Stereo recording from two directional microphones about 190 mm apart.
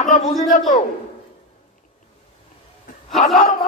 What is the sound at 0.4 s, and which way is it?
Speech, 40° left (ahead or behind).